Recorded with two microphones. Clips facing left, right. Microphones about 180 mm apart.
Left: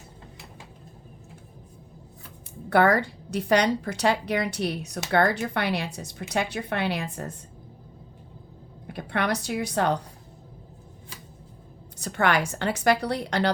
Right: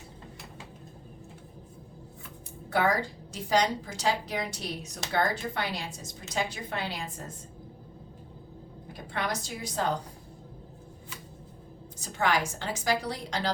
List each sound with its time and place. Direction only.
2.6 s a woman's voice: 65° left (ahead or behind)
8.9 s a woman's voice: 65° left (ahead or behind)
11.9 s a woman's voice: 65° left (ahead or behind)